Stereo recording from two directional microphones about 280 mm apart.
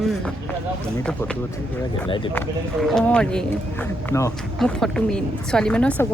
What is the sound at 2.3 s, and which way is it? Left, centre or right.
Speech, centre.